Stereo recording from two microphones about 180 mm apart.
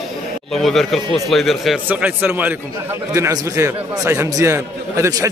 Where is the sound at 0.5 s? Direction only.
Centre (ahead or behind).